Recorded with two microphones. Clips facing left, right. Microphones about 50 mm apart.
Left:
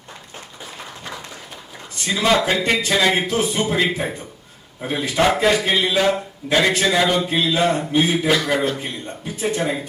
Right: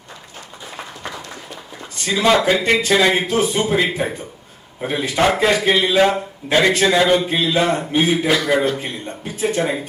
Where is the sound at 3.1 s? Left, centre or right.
Right.